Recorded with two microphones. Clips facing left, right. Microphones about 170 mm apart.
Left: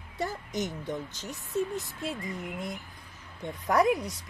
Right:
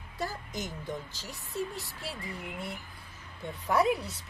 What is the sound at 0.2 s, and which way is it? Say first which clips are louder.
Speech: left 4 dB; 20° left (ahead or behind).